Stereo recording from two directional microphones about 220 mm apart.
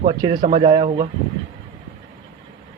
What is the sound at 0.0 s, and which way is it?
Speech, 25° right (ahead or behind).